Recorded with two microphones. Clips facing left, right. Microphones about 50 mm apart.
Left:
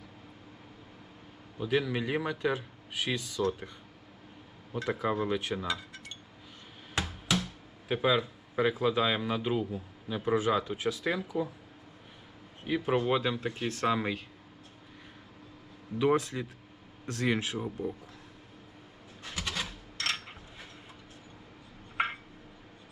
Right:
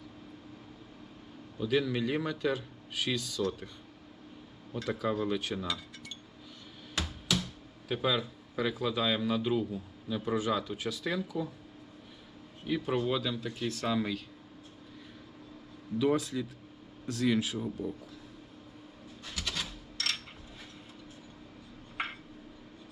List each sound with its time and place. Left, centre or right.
1.5 s a man's voice: left
4.7 s a man's voice: left
6.9 s a sound: left
7.9 s a man's voice: left
12.6 s a man's voice: left
16.0 s speech: left
17.8 s a man's voice: left
19.2 s a sound: left
21.9 s a sound: centre